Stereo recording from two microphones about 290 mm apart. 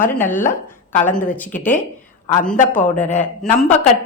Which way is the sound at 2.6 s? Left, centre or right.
Left.